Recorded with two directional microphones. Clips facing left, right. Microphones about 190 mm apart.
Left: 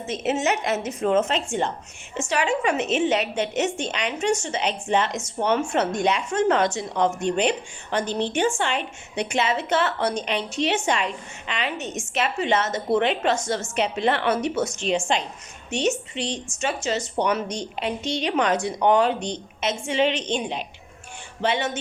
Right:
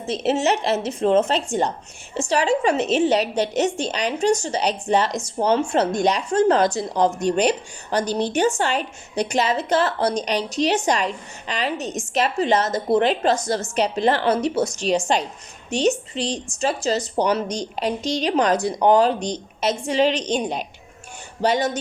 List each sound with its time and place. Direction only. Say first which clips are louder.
0.1 s a woman's voice: right 3 dB; 35° right (ahead or behind)